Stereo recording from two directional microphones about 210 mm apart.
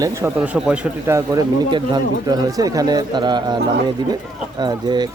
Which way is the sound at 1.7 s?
20° right (ahead or behind).